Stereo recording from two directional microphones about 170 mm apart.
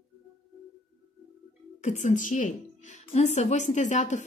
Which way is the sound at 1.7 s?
45° left (ahead or behind).